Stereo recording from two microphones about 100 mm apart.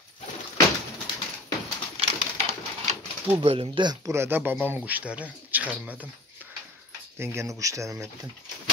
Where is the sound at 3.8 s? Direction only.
40° right (ahead or behind).